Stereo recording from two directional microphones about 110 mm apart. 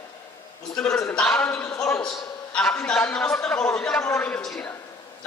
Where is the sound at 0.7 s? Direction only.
10° left (ahead or behind).